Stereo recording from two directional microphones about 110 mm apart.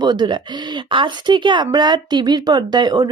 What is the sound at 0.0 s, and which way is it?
Speech, 40° right (ahead or behind).